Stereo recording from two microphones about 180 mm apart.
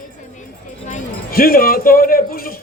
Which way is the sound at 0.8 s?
50° left (ahead or behind).